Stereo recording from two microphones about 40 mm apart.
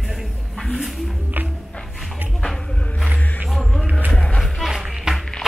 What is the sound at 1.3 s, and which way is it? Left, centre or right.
Music, right.